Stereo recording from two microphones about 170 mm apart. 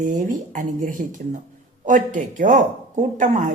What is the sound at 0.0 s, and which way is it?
Speech, 50° right (ahead or behind).